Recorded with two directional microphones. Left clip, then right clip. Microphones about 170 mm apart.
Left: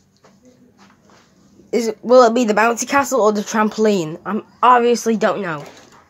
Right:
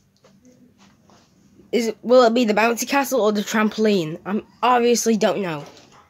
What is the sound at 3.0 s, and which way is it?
Speech, 30° right (ahead or behind).